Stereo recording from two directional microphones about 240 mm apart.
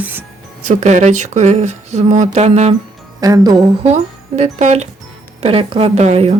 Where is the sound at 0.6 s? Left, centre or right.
Right.